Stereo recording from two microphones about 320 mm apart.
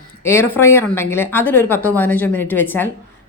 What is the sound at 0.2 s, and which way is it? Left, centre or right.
A woman's voice, centre.